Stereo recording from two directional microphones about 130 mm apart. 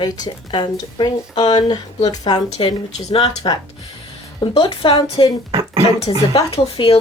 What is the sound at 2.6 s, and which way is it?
Speech, 55° left (ahead or behind).